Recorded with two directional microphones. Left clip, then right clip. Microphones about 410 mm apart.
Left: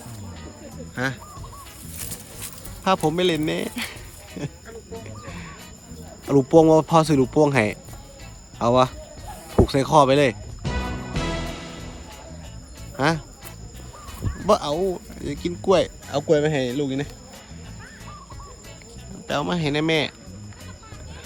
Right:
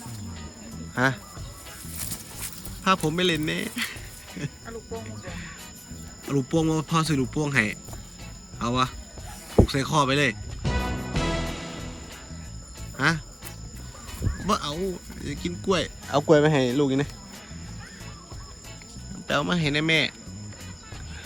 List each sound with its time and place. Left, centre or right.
0.9 s speech: centre
2.8 s speech: centre
5.2 s music: centre
6.5 s speech: centre
9.6 s music: centre
13.0 s speech: centre
14.3 s a sound: centre
14.7 s speech: centre
19.3 s speech: centre